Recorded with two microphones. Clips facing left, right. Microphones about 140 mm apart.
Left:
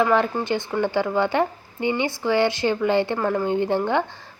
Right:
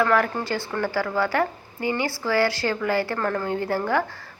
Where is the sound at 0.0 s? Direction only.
20° left (ahead or behind).